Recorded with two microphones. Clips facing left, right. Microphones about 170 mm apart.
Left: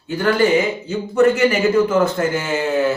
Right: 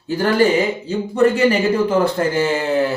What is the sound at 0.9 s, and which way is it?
Speech, 30° right (ahead or behind).